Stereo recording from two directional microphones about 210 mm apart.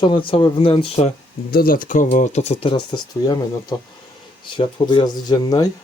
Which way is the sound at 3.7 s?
20° left (ahead or behind).